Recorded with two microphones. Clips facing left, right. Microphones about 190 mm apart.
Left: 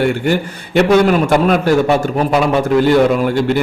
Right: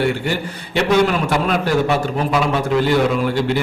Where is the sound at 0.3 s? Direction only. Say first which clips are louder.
Left 6 dB; 50° left (ahead or behind).